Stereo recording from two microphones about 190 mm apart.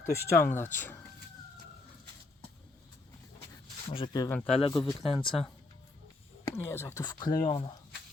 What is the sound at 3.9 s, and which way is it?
Speech, 25° left (ahead or behind).